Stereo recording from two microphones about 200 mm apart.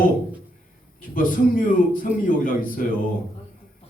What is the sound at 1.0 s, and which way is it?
A man's voice, 45° left (ahead or behind).